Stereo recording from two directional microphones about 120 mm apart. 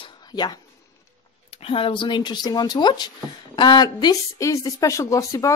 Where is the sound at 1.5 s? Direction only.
50° left (ahead or behind).